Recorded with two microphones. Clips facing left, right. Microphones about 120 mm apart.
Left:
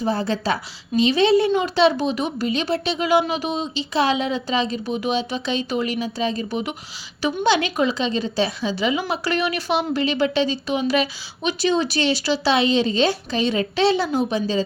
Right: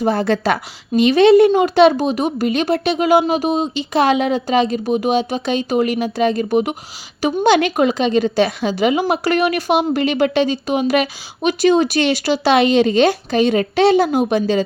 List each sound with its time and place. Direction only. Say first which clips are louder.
0.0 s a woman's voice: right 6 dB; 65° right (ahead or behind); by 14.2 s 50° right (ahead or behind)
14.3 s a woman's voice: right 6 dB; 60° right (ahead or behind)